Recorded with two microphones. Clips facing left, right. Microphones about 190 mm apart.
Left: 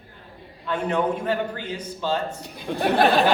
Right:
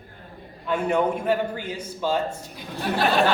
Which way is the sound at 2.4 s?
60° left (ahead or behind).